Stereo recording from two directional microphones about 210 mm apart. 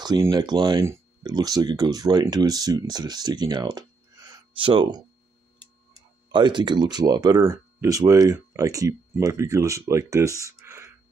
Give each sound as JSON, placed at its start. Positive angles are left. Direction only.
{"t": 0.0, "sound": "speech", "side_deg": -20}